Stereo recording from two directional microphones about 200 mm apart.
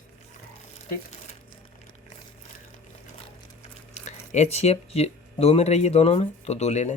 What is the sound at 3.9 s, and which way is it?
Speech, 35° left (ahead or behind).